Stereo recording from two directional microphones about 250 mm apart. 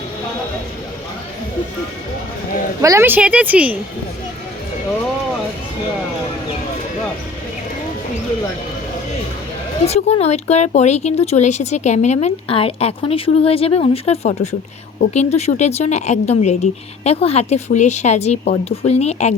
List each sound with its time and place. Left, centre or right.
2.8 s a woman's voice: centre
9.8 s speech: left